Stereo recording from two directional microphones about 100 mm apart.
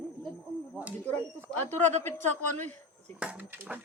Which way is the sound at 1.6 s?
20° left (ahead or behind).